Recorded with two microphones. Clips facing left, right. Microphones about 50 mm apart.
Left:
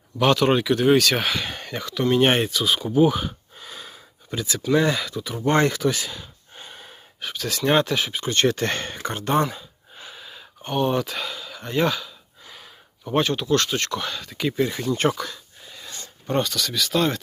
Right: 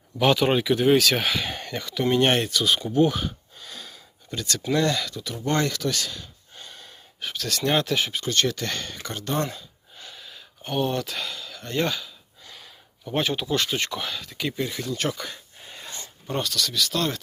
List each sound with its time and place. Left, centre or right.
0.2 s speech: centre
2.1 s speech: centre
5.5 s a sound: left
7.2 s speech: centre
8.2 s speech: left
9.4 s gasp: centre
10.6 s a sound: centre
13.1 s speech: centre
15.7 s dog: right
16.2 s speech: centre